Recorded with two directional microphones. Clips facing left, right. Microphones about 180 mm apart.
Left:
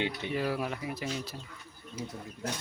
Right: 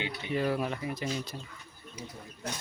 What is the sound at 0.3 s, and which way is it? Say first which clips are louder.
Speech: right 4 dB; 5° left (ahead or behind).